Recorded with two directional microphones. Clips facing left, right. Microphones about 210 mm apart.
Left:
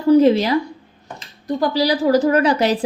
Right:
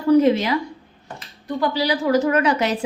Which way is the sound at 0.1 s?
35° left (ahead or behind).